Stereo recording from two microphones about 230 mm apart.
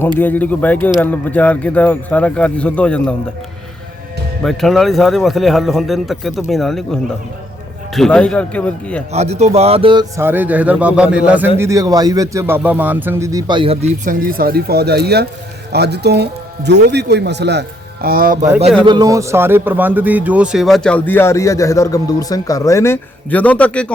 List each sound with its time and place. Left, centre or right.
0.2 s speech: centre
4.4 s speech: centre
7.9 s speech: centre
9.1 s speech: right
14.0 s speech: right
18.9 s speech: centre